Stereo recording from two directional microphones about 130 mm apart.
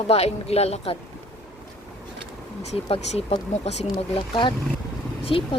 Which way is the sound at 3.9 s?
40° left (ahead or behind).